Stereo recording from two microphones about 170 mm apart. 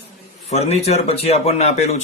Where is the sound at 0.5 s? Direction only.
40° left (ahead or behind).